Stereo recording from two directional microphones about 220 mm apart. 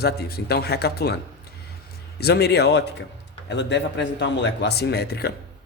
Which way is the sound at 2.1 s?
45° left (ahead or behind).